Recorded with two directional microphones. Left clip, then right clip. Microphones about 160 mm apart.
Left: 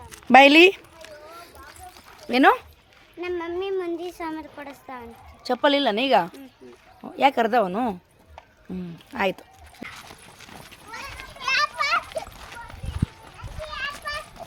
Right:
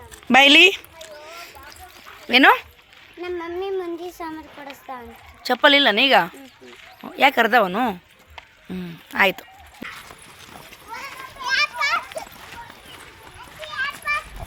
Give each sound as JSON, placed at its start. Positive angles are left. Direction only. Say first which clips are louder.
{"t": 0.3, "sound": "speech", "louder": "right 1 dB", "side_deg": 5}
{"t": 2.2, "sound": "speech", "louder": "right 4 dB", "side_deg": 5}
{"t": 3.2, "sound": "speech", "louder": "even", "side_deg": 35}
{"t": 5.4, "sound": "a woman's voice", "louder": "right 6 dB", "side_deg": -10}
{"t": 11.8, "sound": "splash", "louder": "right 1 dB", "side_deg": 20}
{"t": 13.7, "sound": "children playing", "louder": "right 6 dB", "side_deg": 30}